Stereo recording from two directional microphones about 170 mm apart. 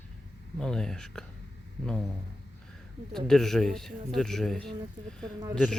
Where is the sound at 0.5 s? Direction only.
5° left (ahead or behind).